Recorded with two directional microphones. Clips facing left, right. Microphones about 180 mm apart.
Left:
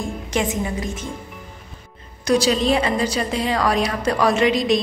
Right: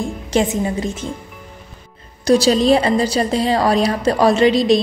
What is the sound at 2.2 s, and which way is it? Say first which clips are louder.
A woman's voice: right 5 dB; 30° right (ahead or behind).